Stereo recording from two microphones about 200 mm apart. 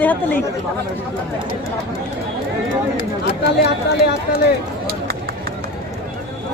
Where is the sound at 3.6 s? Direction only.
50° left (ahead or behind).